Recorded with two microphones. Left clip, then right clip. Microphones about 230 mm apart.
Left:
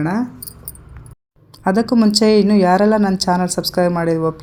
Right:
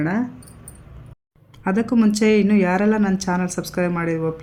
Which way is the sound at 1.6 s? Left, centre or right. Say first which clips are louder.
Left 4 dB; centre.